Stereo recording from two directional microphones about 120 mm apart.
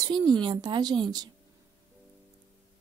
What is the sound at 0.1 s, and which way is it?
Speech, 40° right (ahead or behind).